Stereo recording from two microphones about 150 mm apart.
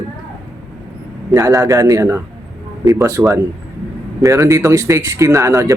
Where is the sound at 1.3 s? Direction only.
25° right (ahead or behind).